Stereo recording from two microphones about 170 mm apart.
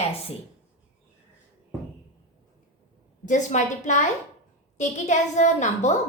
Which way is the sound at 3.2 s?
45° left (ahead or behind).